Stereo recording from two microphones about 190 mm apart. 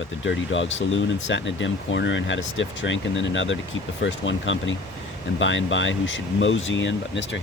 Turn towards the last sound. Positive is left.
turn(degrees=70)  # may be behind; listen again after turning